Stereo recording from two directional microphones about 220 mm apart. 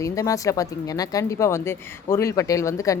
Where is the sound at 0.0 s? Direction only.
15° left (ahead or behind).